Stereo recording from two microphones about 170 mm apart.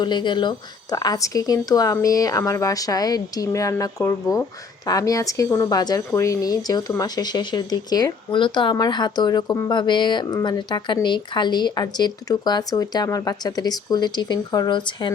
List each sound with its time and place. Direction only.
0.0 s speech: 25° left (ahead or behind)